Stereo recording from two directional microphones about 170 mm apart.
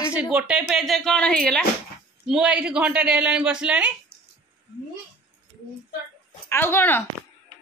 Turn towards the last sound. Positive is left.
turn(degrees=10)  # may be behind; listen again after turning